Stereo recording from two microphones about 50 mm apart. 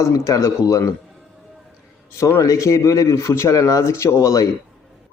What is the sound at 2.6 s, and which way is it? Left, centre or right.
Speech, left.